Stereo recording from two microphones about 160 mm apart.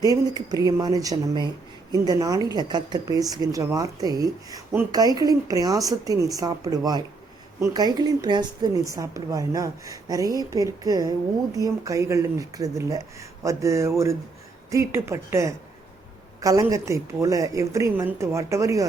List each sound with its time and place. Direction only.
0.0 s speech: 25° right (ahead or behind)